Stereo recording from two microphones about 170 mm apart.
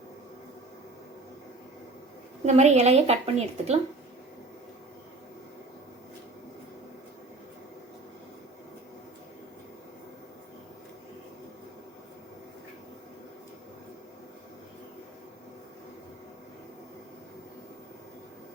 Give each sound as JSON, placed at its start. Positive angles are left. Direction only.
{"t": 2.5, "sound": "a woman's voice", "side_deg": -40}